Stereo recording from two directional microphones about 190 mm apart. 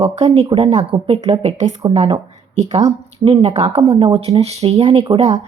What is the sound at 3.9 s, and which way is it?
Speech, 20° right (ahead or behind).